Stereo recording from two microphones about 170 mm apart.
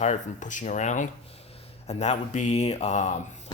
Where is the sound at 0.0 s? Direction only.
45° left (ahead or behind).